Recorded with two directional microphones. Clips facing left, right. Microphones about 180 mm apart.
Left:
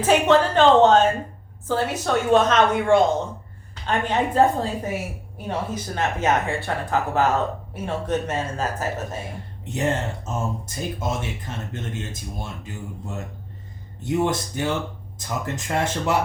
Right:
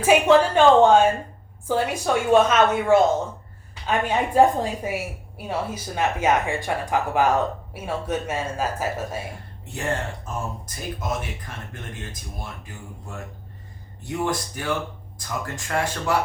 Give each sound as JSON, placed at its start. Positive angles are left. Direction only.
{"t": 0.0, "sound": "a sound", "side_deg": -10}
{"t": 1.6, "sound": "speech", "side_deg": -10}
{"t": 9.6, "sound": "speech", "side_deg": 20}
{"t": 14.0, "sound": "speech", "side_deg": 20}